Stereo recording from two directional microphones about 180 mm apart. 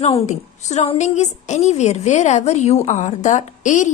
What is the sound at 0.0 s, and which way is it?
A woman's voice, 35° left (ahead or behind).